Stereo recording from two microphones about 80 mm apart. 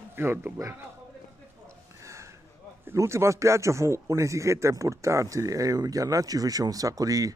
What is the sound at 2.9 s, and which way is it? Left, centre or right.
Speech, right.